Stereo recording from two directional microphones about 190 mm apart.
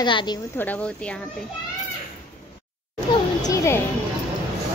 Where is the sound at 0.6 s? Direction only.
10° left (ahead or behind).